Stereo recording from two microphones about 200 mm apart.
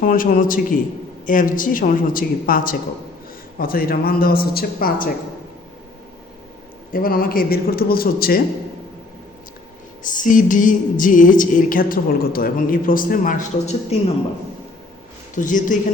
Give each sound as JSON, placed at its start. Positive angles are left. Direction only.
{"t": 0.0, "sound": "speech", "side_deg": 45}
{"t": 6.9, "sound": "speech", "side_deg": 45}
{"t": 10.0, "sound": "speech", "side_deg": 40}
{"t": 15.4, "sound": "speech", "side_deg": 40}